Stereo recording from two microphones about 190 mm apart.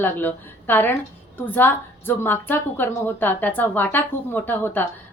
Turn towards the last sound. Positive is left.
turn(degrees=10)  # may be behind; listen again after turning